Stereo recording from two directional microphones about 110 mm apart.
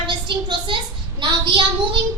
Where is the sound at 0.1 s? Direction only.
45° right (ahead or behind).